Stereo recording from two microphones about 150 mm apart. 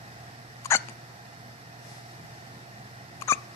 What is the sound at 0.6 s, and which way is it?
Hiccup, 20° left (ahead or behind).